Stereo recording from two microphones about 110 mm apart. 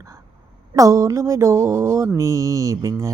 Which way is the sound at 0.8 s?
30° right (ahead or behind).